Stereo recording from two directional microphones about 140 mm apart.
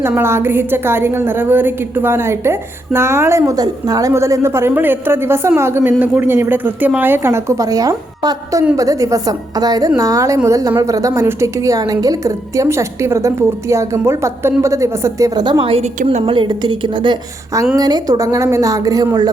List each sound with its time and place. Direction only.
0.1 s a woman's voice: 15° right (ahead or behind)